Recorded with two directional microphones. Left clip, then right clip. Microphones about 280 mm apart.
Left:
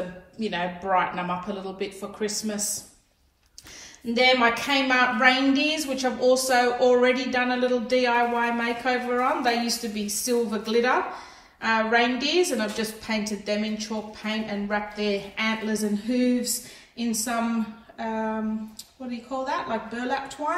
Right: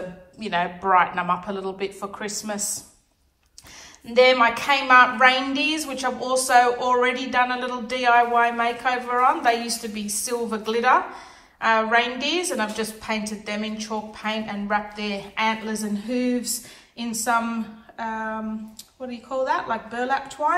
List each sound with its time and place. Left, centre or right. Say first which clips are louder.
0.4 s a man's voice: right 4 dB; centre
4.0 s a woman's voice: right 4 dB; centre